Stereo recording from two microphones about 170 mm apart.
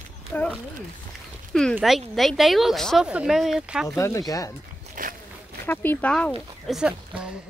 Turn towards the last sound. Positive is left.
turn(degrees=-5)  # may be behind; listen again after turning